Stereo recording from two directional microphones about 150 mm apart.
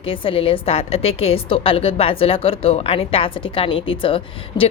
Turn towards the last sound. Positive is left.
turn(degrees=35)  # may be behind; listen again after turning